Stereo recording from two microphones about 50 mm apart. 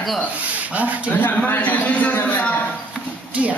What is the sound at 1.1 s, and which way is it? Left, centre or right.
A man's voice, left.